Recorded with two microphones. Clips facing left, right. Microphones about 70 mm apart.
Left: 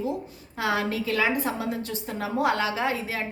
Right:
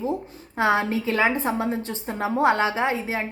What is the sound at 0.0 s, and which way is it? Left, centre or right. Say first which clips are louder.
A woman's voice: right 2 dB; right.